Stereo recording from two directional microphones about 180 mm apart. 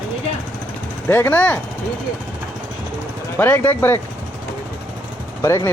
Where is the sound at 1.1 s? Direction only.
10° left (ahead or behind).